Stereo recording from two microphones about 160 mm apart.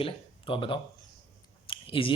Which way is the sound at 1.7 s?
35° left (ahead or behind).